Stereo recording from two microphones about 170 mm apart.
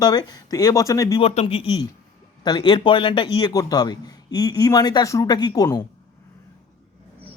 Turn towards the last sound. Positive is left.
turn(degrees=25)  # may be behind; listen again after turning